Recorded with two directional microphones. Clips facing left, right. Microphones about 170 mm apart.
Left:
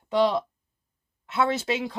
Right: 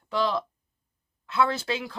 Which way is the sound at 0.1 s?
20° left (ahead or behind).